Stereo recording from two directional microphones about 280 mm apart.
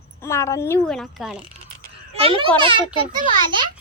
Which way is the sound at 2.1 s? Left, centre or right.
Centre.